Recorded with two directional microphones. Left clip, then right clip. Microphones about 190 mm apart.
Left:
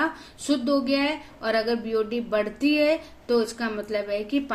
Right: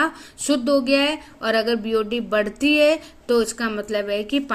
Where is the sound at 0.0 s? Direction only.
45° right (ahead or behind).